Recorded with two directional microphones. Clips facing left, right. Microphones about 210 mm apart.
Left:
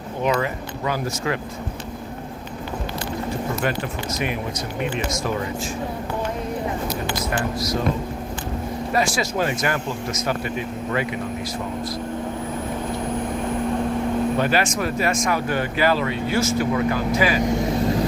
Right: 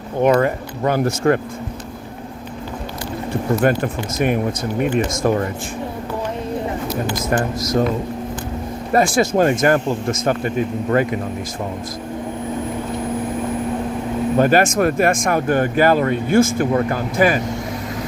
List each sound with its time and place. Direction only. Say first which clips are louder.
0.2 s speech: right 7 dB; 50° right (ahead or behind)
3.6 s speech: right 7 dB; 50° right (ahead or behind)
7.2 s speech: right 4 dB; 45° right (ahead or behind)
8.9 s speech: right 7 dB; 50° right (ahead or behind)
14.3 s speech: right 6 dB; 45° right (ahead or behind)